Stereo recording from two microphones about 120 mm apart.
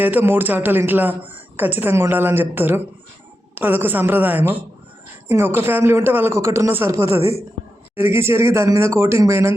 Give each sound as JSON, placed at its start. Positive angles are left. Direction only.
{"t": 0.0, "sound": "a woman's voice", "side_deg": -15}
{"t": 7.2, "sound": "a woman's voice", "side_deg": 55}
{"t": 7.9, "sound": "speech", "side_deg": -20}